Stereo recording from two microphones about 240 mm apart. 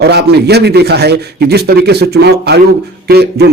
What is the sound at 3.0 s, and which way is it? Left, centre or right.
Beatboxing, right.